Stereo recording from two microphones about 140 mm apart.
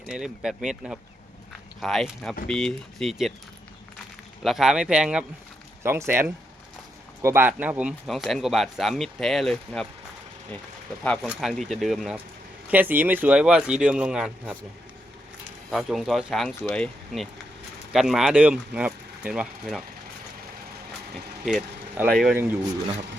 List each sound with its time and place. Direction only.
0.1 s speech: 5° right (ahead or behind)
4.4 s speech: 5° right (ahead or behind)
5.8 s speech: 20° right (ahead or behind); by 9.8 s centre (ahead or behind)
11.0 s speech: 5° left (ahead or behind)
12.6 s speech: 15° right (ahead or behind)
15.7 s speech: centre (ahead or behind)
22.1 s speech: centre (ahead or behind)